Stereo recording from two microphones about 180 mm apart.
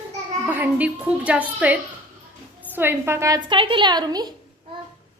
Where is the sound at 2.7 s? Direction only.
15° right (ahead or behind).